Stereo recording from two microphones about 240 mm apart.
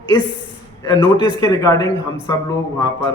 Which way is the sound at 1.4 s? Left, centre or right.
Centre.